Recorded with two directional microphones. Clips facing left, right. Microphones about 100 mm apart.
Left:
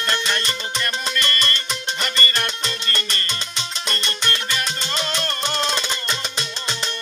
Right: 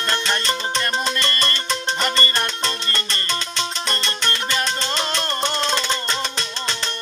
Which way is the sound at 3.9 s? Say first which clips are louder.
Right 1 dB; 25° right (ahead or behind).